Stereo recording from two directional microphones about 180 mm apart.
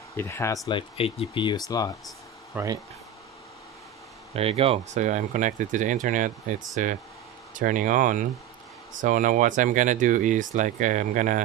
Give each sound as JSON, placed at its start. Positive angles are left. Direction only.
{"t": 0.1, "sound": "speech", "side_deg": 15}
{"t": 0.7, "sound": "speech", "side_deg": 30}
{"t": 2.5, "sound": "speech", "side_deg": -20}
{"t": 4.3, "sound": "speech", "side_deg": -35}